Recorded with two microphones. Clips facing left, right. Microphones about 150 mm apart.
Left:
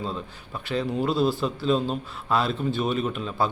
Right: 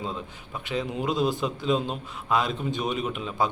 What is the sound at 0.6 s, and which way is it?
A man's voice, 20° right (ahead or behind).